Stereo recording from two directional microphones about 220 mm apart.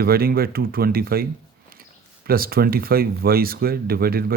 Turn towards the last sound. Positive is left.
turn(degrees=-45)  # may be behind; listen again after turning